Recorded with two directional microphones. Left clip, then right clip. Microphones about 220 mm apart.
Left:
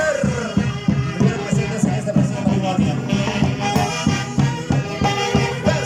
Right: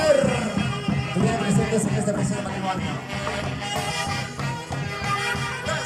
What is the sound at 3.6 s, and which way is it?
Music, 50° left (ahead or behind).